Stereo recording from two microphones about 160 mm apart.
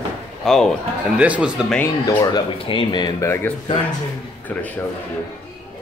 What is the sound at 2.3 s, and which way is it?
Speech, 35° left (ahead or behind).